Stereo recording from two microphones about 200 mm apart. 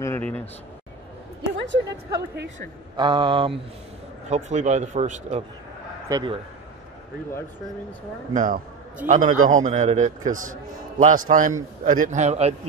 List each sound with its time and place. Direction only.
0.0 s speech: 10° left (ahead or behind)
1.6 s a woman's voice: 65° right (ahead or behind)
3.0 s speech: 25° right (ahead or behind)
4.3 s a man's voice: 35° right (ahead or behind)
6.0 s a man's voice: 20° right (ahead or behind)
8.3 s a man's voice: 40° right (ahead or behind)